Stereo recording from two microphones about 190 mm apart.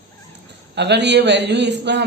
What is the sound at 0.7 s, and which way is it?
Speech, 65° right (ahead or behind).